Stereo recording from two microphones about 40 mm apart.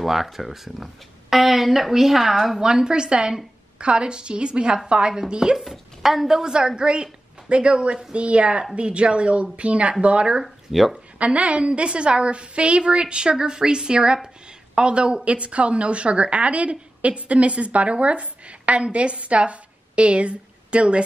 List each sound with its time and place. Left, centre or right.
0.0 s a woman's voice: centre
2.6 s a woman's voice: centre
5.6 s a woman's voice: centre; by 10.4 s right
10.4 s speech: centre
11.1 s a woman's voice: right